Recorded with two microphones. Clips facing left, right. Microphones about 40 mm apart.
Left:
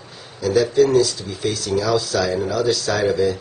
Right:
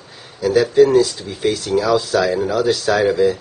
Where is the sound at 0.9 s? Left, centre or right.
Right.